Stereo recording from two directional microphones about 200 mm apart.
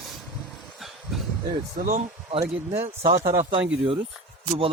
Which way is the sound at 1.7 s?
40° right (ahead or behind).